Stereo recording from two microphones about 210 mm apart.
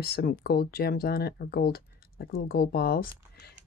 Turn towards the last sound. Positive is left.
turn(degrees=45)  # may be behind; listen again after turning